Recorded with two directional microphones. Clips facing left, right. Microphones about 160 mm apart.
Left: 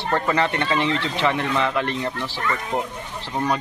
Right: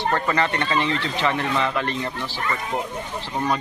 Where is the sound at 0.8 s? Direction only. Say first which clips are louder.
Left 1 dB; 25° left (ahead or behind).